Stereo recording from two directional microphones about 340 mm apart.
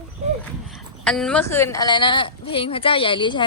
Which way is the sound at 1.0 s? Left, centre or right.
Centre.